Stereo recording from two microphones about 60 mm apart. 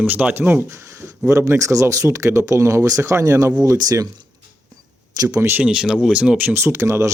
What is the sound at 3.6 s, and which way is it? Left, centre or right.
Speech, right.